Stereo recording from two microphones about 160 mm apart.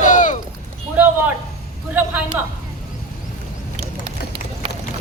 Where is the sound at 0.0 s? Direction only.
50° left (ahead or behind).